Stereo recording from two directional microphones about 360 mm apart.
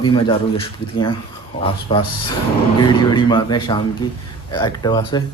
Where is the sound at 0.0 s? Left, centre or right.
Centre.